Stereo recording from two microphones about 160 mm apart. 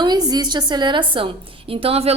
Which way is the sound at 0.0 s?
25° right (ahead or behind).